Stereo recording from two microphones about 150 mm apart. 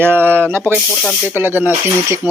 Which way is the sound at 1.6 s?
10° right (ahead or behind).